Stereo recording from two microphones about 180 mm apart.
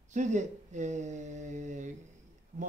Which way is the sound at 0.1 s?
40° right (ahead or behind).